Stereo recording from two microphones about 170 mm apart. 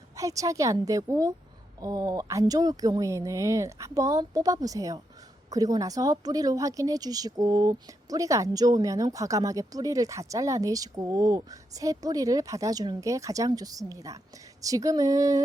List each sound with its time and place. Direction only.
0.2 s a woman's voice: 20° right (ahead or behind)